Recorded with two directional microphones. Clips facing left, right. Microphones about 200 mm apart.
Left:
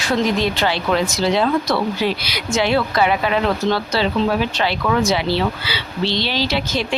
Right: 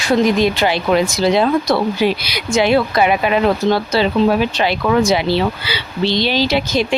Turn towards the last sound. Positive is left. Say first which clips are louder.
# right 5 dB
turn(degrees=-15)  # may be behind; listen again after turning